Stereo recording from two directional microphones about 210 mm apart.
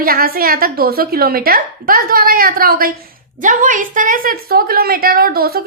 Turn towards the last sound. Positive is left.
turn(degrees=-45)  # may be behind; listen again after turning